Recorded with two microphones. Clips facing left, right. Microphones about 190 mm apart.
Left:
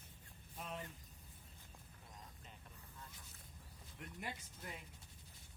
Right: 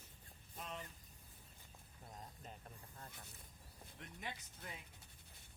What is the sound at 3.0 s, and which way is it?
Speech, 60° right (ahead or behind).